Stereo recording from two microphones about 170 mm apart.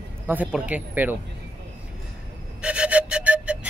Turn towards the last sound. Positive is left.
turn(degrees=-5)  # may be behind; listen again after turning